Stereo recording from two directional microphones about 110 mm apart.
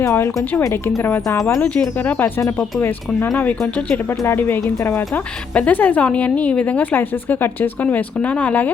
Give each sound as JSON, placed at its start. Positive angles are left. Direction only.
{"t": 0.0, "sound": "speech", "side_deg": 25}
{"t": 1.5, "sound": "speech", "side_deg": 10}